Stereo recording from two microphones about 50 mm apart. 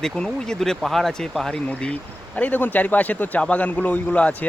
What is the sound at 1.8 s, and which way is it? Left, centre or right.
A man's voice, left.